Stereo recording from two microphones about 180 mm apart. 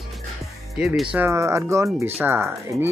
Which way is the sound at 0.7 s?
5° right (ahead or behind).